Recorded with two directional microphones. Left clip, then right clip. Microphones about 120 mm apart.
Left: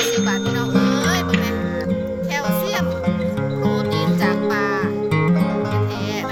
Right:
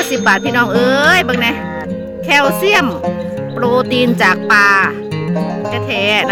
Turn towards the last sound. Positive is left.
turn(degrees=5)  # may be behind; listen again after turning